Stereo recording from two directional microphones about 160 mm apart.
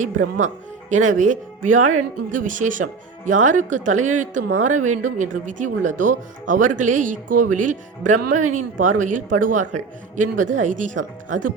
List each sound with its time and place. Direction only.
0.0 s speech: 50° right (ahead or behind)